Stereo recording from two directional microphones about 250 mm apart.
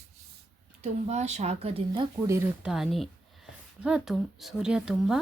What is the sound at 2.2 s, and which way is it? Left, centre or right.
A woman's voice, centre.